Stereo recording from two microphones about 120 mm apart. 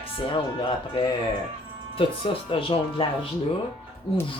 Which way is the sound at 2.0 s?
50° left (ahead or behind).